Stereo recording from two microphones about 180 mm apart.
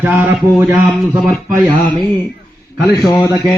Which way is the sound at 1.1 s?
Centre (ahead or behind).